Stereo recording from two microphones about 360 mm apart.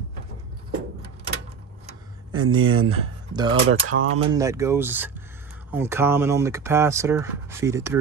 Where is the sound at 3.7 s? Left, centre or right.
Right.